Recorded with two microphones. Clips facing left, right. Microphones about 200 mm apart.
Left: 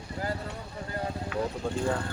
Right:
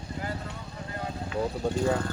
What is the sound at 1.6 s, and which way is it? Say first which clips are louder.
Speech: right 3 dB; 20° right (ahead or behind).